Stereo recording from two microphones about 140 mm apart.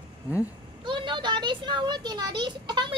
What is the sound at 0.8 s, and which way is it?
A child's voice, 35° right (ahead or behind).